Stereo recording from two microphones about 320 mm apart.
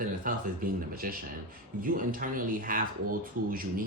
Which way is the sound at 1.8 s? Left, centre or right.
Right.